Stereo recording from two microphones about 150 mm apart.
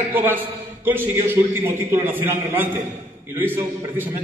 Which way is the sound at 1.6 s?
15° right (ahead or behind).